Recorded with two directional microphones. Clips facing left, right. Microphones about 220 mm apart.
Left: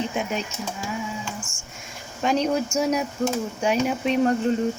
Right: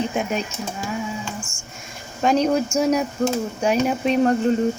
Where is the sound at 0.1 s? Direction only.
50° right (ahead or behind).